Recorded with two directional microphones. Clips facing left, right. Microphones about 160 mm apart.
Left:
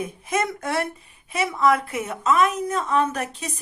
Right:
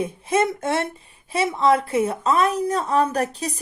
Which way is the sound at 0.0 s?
30° right (ahead or behind).